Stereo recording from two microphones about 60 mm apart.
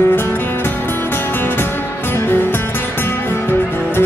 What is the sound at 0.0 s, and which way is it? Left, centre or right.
Music, left.